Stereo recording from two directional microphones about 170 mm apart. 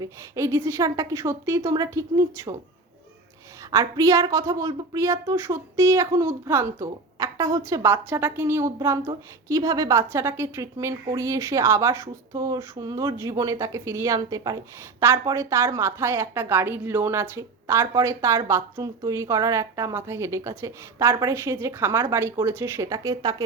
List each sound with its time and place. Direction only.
0.0 s a woman's voice: 15° right (ahead or behind)
3.7 s a woman's voice: 20° right (ahead or behind)